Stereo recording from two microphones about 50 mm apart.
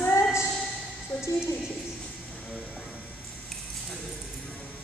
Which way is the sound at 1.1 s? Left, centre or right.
Left.